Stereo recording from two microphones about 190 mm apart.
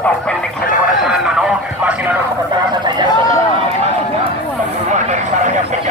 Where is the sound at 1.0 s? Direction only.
5° right (ahead or behind).